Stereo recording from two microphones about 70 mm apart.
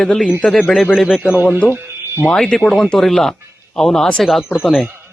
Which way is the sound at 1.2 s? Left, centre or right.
Centre.